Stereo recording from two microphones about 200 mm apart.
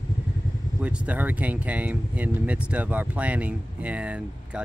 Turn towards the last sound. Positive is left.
turn(degrees=-5)  # may be behind; listen again after turning